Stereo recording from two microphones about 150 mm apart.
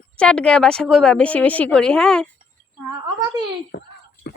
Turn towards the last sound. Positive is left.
turn(degrees=90)